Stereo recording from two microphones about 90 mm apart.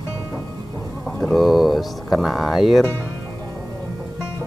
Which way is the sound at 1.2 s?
Centre (ahead or behind).